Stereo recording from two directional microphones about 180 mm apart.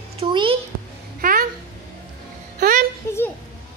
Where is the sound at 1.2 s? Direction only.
50° right (ahead or behind).